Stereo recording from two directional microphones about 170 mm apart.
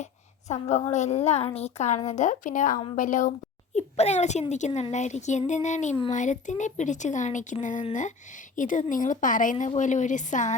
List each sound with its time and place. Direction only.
0.0 s a woman's voice: 40° left (ahead or behind)